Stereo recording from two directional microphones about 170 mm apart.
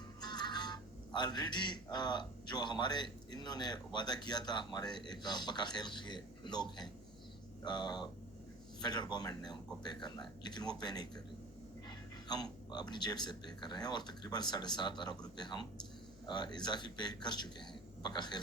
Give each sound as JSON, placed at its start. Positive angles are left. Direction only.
{"t": 0.2, "sound": "speech", "side_deg": 25}